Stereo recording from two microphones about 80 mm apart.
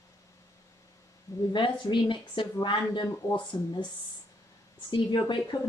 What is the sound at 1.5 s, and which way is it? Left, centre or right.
Speech, left.